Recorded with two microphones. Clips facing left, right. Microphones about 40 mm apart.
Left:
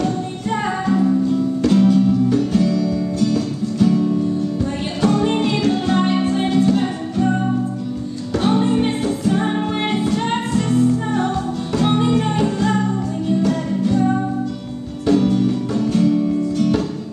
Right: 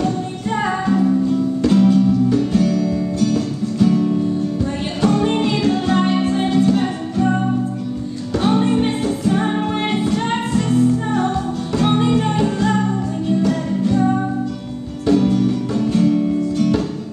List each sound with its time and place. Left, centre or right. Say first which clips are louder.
0.6 s music: right 1 dB; centre
2.7 s music: even; right
3.2 s music: even; centre
5.4 s music: right 1 dB; centre
8.4 s music: right 1 dB; centre
9.3 s music: right 1 dB; centre
15.0 s music: even; centre